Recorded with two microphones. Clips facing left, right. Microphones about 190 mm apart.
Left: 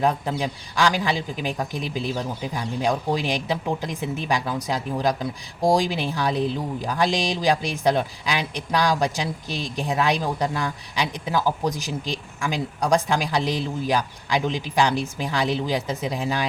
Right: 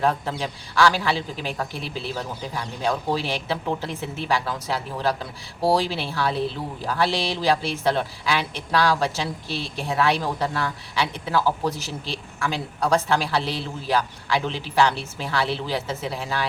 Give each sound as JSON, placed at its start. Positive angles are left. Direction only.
{"t": 0.0, "sound": "speech", "side_deg": 15}